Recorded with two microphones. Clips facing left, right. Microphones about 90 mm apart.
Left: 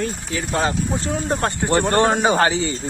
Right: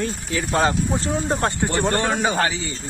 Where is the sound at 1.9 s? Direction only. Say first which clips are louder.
Left 7 dB; 40° left (ahead or behind).